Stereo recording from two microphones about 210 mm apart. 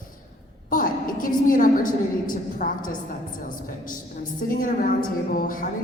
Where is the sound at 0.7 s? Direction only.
40° left (ahead or behind).